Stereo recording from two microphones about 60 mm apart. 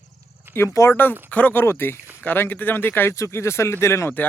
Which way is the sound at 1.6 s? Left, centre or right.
Left.